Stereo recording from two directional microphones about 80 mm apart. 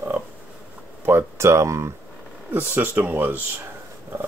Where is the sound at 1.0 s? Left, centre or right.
Right.